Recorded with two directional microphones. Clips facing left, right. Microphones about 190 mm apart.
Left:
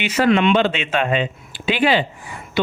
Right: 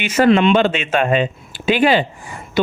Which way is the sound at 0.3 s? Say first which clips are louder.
Right 3 dB; 35° right (ahead or behind).